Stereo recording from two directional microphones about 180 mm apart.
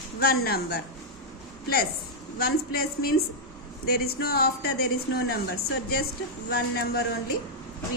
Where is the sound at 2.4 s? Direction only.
60° left (ahead or behind).